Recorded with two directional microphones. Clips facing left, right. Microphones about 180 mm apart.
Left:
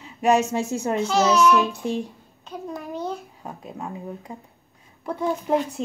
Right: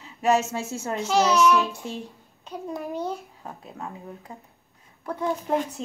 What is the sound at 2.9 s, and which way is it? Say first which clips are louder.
Babbling: left 1 dB; 10° right (ahead or behind).